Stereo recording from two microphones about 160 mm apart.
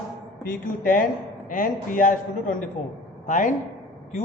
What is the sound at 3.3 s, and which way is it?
Speech, 55° left (ahead or behind).